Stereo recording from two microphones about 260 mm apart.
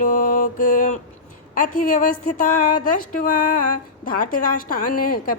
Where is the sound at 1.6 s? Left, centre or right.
Left.